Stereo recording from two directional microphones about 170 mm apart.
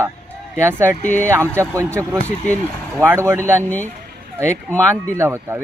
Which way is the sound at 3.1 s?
15° right (ahead or behind).